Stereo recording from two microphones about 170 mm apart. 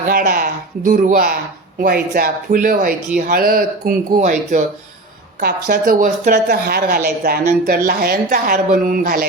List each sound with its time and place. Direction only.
0.1 s speech: 55° right (ahead or behind)
5.4 s speech: 65° right (ahead or behind)